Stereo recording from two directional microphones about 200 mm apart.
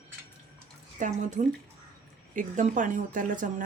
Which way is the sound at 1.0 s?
35° right (ahead or behind).